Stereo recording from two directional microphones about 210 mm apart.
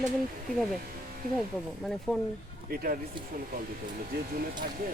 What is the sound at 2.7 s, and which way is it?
Speech, 45° right (ahead or behind).